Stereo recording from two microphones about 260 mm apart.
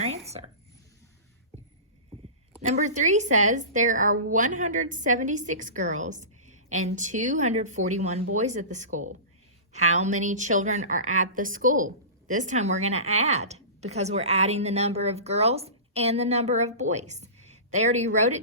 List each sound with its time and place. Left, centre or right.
2.6 s a woman's voice: right